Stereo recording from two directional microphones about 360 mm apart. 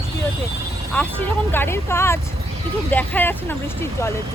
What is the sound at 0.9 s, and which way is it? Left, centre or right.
Speech, centre.